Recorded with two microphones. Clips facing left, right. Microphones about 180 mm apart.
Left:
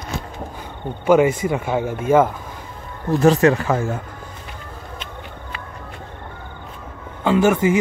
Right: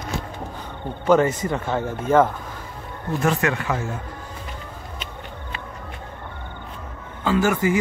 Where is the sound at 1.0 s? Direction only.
10° left (ahead or behind).